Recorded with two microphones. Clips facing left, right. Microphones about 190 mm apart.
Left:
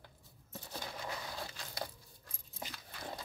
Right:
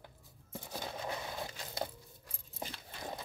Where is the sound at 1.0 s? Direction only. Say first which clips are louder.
Right 3 dB; 20° right (ahead or behind).